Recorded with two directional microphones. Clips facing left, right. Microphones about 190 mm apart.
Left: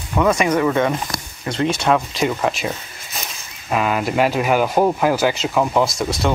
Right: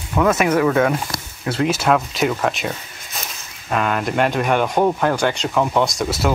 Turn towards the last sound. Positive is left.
turn(degrees=-5)  # may be behind; listen again after turning